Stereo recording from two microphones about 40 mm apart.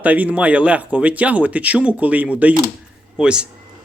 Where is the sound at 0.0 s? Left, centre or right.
Right.